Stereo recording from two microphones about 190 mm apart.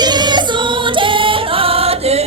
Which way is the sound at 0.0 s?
20° right (ahead or behind).